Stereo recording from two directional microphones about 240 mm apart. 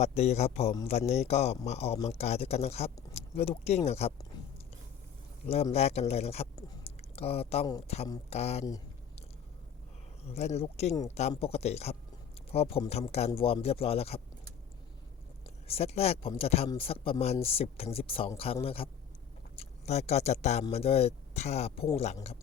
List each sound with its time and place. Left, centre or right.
0.0 s speech: left
5.5 s speech: left
10.2 s speech: left
15.6 s speech: left